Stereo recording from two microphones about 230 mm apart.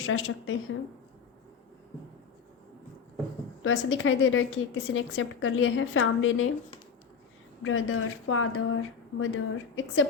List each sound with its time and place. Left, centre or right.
0.0 s a woman's voice: left
3.6 s a woman's voice: left
7.6 s a woman's voice: left